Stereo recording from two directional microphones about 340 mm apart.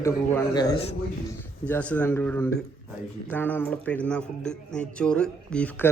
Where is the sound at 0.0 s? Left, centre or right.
Centre.